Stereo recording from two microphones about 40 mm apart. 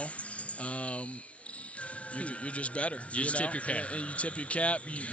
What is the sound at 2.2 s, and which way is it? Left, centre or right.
A man's voice, left.